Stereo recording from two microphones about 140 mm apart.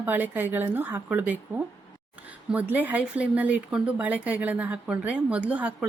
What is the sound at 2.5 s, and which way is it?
A woman's voice, 10° right (ahead or behind).